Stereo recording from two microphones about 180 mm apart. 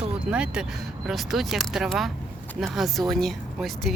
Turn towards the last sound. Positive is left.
turn(degrees=0)  # may be behind; listen again after turning